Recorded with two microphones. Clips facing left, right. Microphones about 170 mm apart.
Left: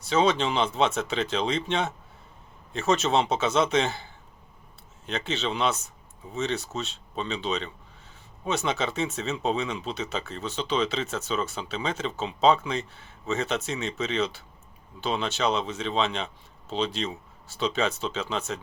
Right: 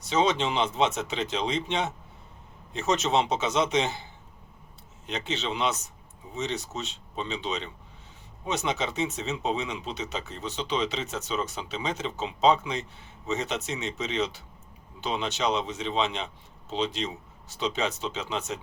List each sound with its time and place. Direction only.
0.1 s speech: 20° right (ahead or behind)